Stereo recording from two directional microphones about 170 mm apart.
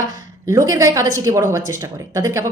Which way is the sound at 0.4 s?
20° right (ahead or behind).